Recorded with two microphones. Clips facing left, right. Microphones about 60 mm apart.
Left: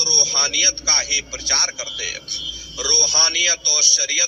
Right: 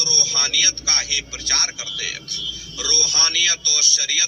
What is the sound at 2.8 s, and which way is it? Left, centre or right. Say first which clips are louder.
A man's voice: left 2 dB; left.